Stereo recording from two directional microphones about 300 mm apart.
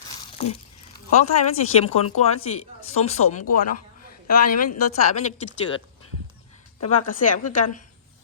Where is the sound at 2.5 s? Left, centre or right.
Left.